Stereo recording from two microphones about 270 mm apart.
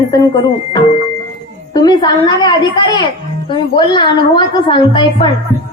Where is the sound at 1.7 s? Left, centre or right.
Centre.